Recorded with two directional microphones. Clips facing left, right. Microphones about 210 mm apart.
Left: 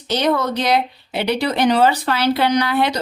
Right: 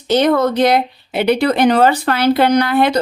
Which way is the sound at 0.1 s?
50° right (ahead or behind).